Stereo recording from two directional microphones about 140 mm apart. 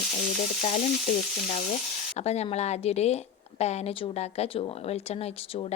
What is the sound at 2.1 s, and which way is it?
A woman's voice, 50° left (ahead or behind).